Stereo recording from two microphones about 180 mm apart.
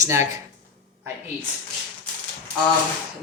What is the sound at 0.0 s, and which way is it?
Speech, 15° right (ahead or behind).